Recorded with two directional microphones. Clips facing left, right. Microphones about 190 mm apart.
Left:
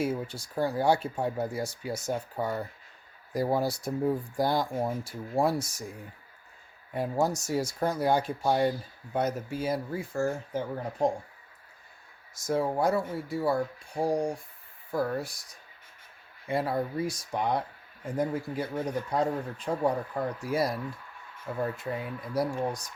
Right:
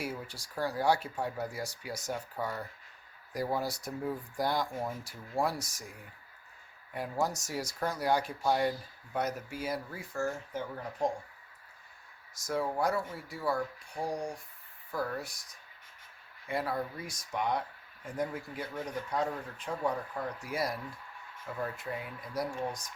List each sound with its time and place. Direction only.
0.0 s speech: 25° left (ahead or behind)
12.3 s speech: 25° left (ahead or behind)
16.5 s speech: 25° left (ahead or behind)